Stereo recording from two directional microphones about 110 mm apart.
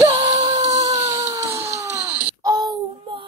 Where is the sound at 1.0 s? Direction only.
35° right (ahead or behind).